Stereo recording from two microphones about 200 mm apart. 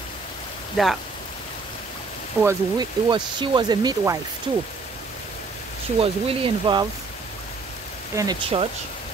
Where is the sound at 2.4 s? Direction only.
15° right (ahead or behind).